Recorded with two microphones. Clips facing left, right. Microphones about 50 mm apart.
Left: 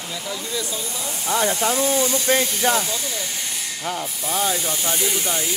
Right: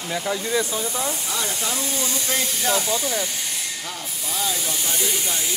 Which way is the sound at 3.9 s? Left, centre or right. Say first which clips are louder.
Left 6 dB; left.